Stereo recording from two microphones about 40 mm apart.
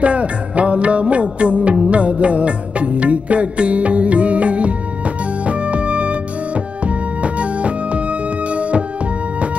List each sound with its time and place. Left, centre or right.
0.0 s music: right